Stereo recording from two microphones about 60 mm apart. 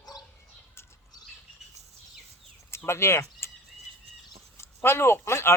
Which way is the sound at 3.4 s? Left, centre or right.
Left.